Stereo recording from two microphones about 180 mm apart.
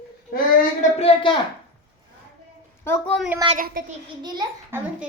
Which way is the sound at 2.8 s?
15° left (ahead or behind).